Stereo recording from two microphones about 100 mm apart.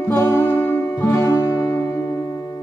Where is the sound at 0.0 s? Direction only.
25° left (ahead or behind).